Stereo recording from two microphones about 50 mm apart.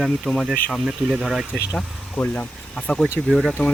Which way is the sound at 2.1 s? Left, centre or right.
Left.